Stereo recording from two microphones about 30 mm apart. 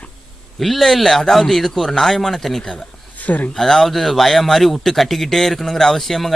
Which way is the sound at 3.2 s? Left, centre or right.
Left.